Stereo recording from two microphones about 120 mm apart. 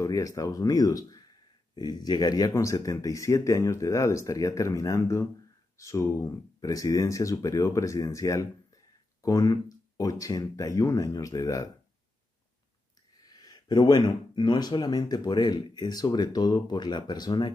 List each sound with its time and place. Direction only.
0.0 s speech: 30° left (ahead or behind)
13.3 s speech: 35° left (ahead or behind)